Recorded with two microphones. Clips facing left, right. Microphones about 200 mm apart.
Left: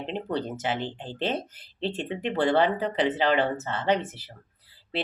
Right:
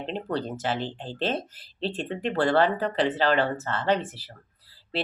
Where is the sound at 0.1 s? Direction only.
15° left (ahead or behind).